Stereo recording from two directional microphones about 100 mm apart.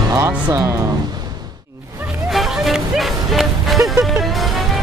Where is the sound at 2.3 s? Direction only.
Centre (ahead or behind).